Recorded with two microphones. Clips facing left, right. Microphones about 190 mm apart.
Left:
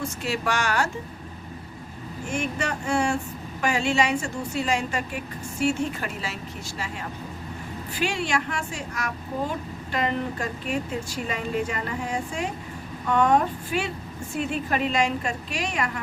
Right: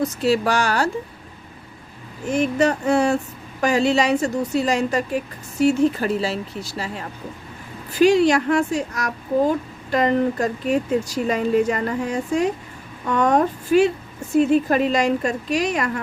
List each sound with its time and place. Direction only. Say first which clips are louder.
0.0 s a woman's voice: right 9 dB; 35° right (ahead or behind)
2.2 s a woman's voice: right 10 dB; 35° right (ahead or behind)
7.9 s a woman's voice: right 12 dB; 40° right (ahead or behind)